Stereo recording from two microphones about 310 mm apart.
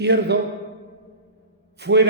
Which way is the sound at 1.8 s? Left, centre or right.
Right.